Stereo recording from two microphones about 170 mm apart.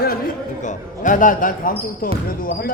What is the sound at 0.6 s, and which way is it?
Speech, 50° left (ahead or behind).